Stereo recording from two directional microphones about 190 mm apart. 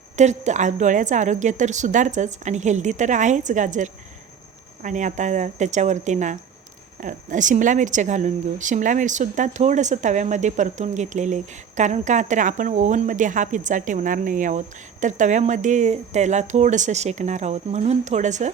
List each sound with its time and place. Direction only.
0.2 s a woman's voice: 40° right (ahead or behind)